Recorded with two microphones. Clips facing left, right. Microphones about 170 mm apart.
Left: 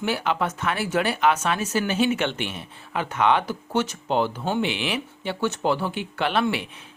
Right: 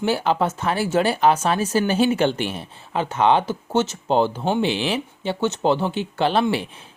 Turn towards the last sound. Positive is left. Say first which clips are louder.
# right 4 dB
turn(degrees=-30)  # may be behind; listen again after turning